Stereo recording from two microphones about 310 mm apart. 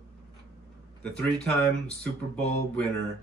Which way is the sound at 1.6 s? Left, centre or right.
Centre.